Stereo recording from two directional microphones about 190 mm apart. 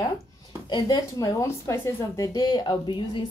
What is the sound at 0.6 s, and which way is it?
Speech, 20° left (ahead or behind).